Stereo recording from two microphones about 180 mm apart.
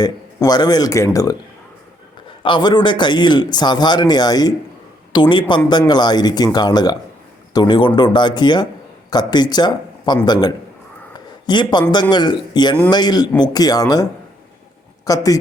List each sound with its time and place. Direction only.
0.0 s a man's voice: 20° left (ahead or behind)
2.4 s a man's voice: 25° left (ahead or behind)
11.4 s a man's voice: 25° left (ahead or behind)